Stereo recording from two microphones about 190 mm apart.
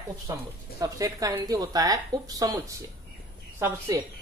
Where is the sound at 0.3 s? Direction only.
15° right (ahead or behind).